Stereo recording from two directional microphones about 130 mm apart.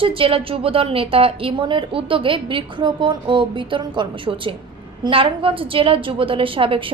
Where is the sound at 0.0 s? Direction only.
45° right (ahead or behind).